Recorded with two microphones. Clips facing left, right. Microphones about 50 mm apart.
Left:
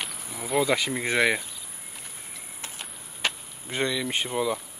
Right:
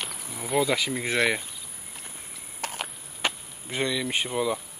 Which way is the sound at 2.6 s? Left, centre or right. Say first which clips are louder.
Right 8 dB; right.